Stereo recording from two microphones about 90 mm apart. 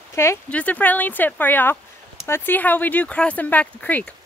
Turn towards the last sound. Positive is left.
turn(degrees=15)  # may be behind; listen again after turning